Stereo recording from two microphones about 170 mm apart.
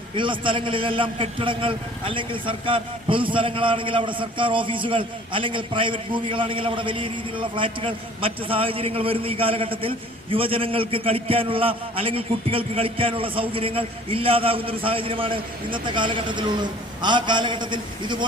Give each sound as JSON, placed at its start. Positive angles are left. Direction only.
{"t": 0.2, "sound": "a man's voice", "side_deg": -30}